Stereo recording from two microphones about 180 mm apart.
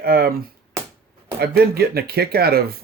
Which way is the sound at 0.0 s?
55° right (ahead or behind).